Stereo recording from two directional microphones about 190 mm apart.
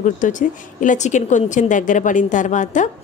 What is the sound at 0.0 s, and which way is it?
A woman's voice, 45° left (ahead or behind).